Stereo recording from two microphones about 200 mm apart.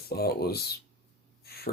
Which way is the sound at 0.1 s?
50° left (ahead or behind).